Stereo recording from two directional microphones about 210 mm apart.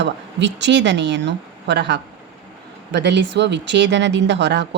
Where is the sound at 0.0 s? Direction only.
55° right (ahead or behind).